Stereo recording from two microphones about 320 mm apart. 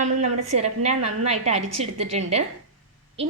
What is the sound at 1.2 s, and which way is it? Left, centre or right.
A woman's voice, right.